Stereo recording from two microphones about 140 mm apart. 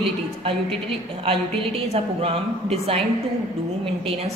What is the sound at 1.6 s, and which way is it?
A woman's voice, 40° right (ahead or behind).